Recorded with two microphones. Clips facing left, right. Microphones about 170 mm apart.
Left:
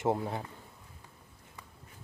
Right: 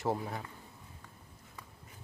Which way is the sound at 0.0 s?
20° left (ahead or behind).